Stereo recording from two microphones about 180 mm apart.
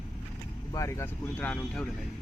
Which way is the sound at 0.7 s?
15° left (ahead or behind).